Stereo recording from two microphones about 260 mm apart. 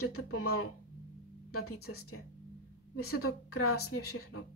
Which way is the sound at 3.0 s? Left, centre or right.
Left.